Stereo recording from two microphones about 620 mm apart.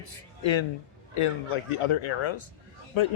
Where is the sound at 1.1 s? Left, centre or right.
Left.